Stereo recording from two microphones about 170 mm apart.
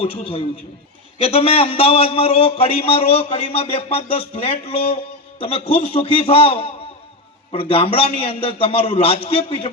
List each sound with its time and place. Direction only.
0.0 s a man's voice: 35° left (ahead or behind)